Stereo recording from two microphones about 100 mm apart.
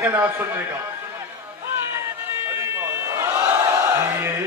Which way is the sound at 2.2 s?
25° right (ahead or behind).